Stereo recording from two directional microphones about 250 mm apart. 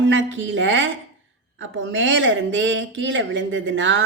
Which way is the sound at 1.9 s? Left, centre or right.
Right.